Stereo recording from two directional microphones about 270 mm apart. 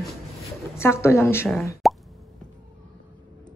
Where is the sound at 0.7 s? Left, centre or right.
Centre.